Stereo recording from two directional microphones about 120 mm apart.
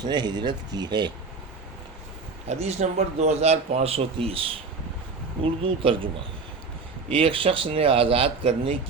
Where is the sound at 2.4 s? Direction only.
65° right (ahead or behind).